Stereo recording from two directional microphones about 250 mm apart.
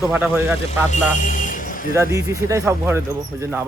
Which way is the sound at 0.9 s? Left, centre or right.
Left.